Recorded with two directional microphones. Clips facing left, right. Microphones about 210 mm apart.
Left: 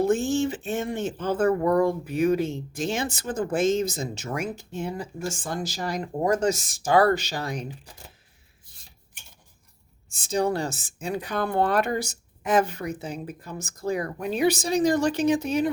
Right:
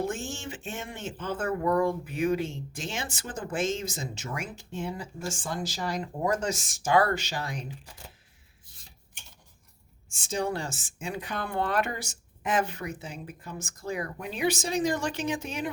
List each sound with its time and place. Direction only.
0.0 s speech: 35° left (ahead or behind)
10.1 s speech: 35° left (ahead or behind)